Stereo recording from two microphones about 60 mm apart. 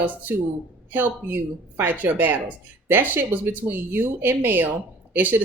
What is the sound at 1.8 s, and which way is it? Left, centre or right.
Speech, right.